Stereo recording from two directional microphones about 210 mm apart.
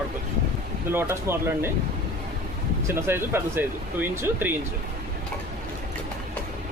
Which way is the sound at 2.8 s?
10° right (ahead or behind).